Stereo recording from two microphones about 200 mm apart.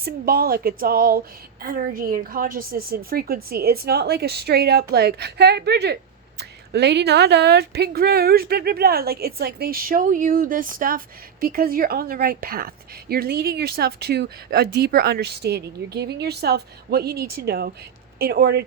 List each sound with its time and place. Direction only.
0.0 s speech: 50° right (ahead or behind)